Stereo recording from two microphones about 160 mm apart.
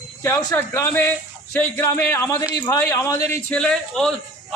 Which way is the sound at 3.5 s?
5° left (ahead or behind).